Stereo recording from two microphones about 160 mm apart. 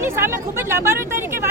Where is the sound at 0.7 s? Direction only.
15° right (ahead or behind).